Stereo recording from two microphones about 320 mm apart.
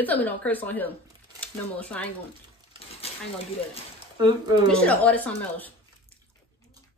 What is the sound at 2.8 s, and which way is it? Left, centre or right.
Speech, centre.